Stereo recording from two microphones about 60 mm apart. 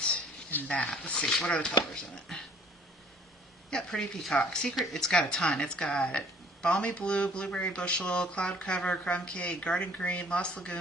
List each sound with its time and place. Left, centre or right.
0.7 s a woman's voice: centre
1.9 s a woman's voice: centre
3.7 s a woman's voice: centre